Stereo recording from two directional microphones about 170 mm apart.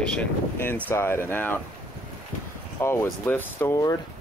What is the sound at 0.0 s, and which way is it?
Speech, 5° left (ahead or behind).